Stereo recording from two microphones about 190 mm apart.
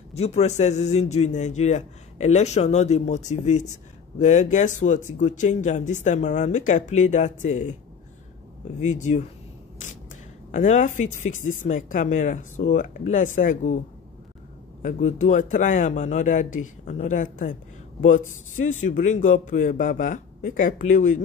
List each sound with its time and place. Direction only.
0.1 s a man's voice: 35° left (ahead or behind)
8.8 s a man's voice: 40° left (ahead or behind)
10.5 s a man's voice: 40° left (ahead or behind)
14.8 s a man's voice: 45° left (ahead or behind)